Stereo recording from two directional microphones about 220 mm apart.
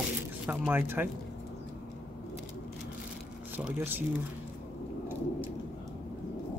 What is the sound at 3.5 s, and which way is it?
Speech, 10° right (ahead or behind).